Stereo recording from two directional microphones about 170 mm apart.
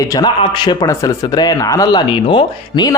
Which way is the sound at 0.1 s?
25° left (ahead or behind).